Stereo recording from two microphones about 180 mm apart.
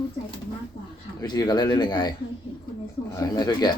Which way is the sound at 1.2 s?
20° left (ahead or behind).